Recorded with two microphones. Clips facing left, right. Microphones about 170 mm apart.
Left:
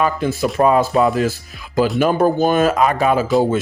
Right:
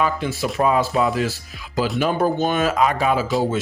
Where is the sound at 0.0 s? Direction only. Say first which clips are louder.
Left 4 dB; 50° left (ahead or behind).